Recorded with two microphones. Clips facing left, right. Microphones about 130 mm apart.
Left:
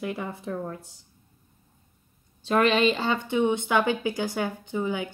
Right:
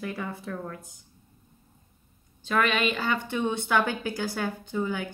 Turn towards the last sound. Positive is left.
turn(degrees=20)  # may be behind; listen again after turning